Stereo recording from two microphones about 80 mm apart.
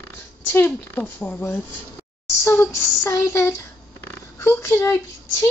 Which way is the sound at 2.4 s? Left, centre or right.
Left.